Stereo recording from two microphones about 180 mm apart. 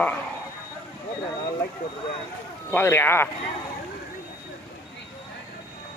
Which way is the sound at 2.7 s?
10° left (ahead or behind).